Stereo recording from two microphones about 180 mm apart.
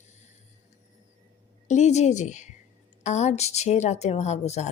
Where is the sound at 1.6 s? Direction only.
40° left (ahead or behind).